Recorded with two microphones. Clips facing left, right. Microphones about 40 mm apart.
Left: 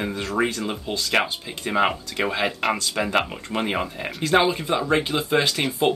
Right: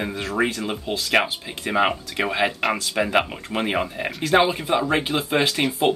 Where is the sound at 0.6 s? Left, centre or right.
Centre.